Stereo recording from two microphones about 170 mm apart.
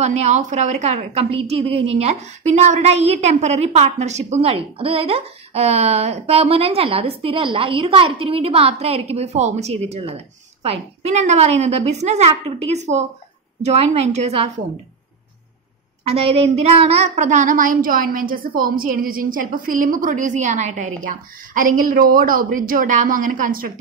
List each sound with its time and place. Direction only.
0.0 s a woman's voice: 40° right (ahead or behind)
16.0 s a woman's voice: 35° right (ahead or behind); by 23.7 s 55° right (ahead or behind)